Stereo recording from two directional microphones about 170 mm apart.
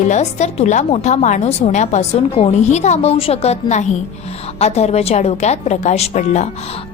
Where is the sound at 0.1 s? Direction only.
40° left (ahead or behind).